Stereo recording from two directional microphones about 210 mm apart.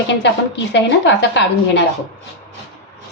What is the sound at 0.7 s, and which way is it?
A woman's voice, 55° left (ahead or behind).